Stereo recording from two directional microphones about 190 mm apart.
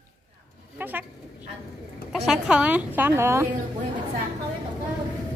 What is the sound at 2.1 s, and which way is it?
Speech, centre (ahead or behind).